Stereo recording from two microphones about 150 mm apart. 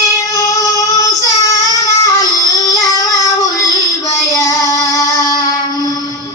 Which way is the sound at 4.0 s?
20° left (ahead or behind).